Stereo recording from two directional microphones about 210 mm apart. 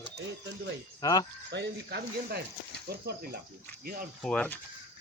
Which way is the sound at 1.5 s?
50° right (ahead or behind).